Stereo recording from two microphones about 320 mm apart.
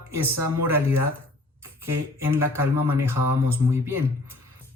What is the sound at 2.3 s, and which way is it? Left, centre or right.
Speech, centre.